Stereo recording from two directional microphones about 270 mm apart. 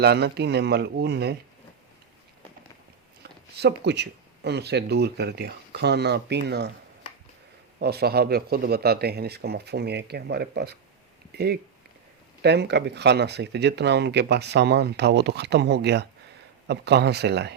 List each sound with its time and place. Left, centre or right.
0.0 s speech: right
3.2 s a sound: right
3.6 s speech: right
7.8 s speech: right